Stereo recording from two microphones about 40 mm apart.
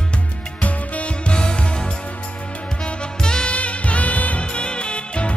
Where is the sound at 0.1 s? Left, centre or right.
Left; by 3.5 s centre.